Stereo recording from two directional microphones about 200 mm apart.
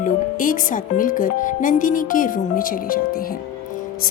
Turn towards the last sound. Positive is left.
turn(degrees=45)  # may be behind; listen again after turning